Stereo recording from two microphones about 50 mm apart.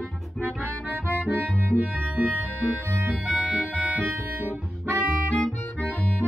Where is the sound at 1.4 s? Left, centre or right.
Left.